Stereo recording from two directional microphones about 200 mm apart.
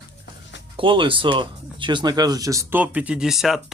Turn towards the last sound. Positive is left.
turn(degrees=0)  # may be behind; listen again after turning